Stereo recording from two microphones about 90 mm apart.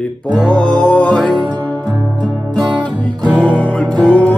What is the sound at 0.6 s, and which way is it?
Music, 10° left (ahead or behind).